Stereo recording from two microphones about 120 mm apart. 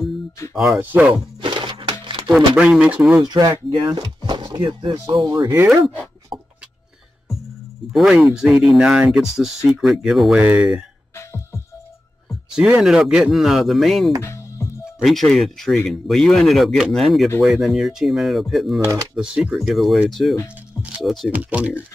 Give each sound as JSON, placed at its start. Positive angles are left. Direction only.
{"t": 0.7, "sound": "speech", "side_deg": -15}
{"t": 1.1, "sound": "a sound", "side_deg": -45}
{"t": 2.2, "sound": "speech", "side_deg": -5}
{"t": 3.2, "sound": "speech", "side_deg": -35}
{"t": 5.1, "sound": "speech", "side_deg": -30}
{"t": 6.3, "sound": "vehicle", "side_deg": -45}
{"t": 7.9, "sound": "speech", "side_deg": 0}
{"t": 11.1, "sound": "music", "side_deg": 20}
{"t": 12.3, "sound": "speech", "side_deg": -5}
{"t": 14.2, "sound": "music", "side_deg": 25}
{"t": 14.9, "sound": "speech", "side_deg": 0}
{"t": 21.4, "sound": "speech", "side_deg": -10}